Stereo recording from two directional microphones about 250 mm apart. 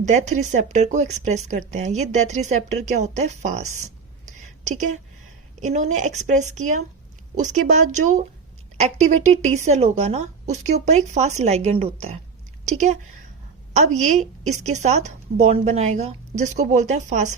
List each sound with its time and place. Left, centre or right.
0.0 s speech: right
4.4 s a sound: right
5.5 s a woman's voice: right